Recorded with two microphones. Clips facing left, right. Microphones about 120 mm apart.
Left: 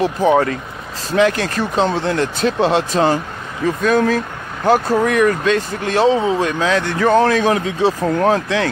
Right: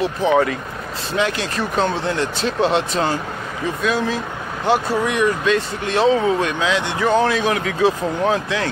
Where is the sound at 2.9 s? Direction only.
40° left (ahead or behind).